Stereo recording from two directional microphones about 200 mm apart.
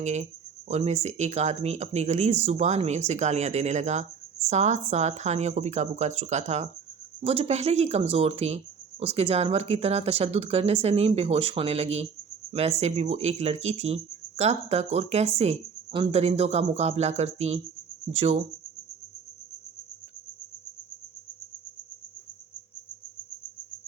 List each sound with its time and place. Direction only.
0.0 s speech: 35° right (ahead or behind)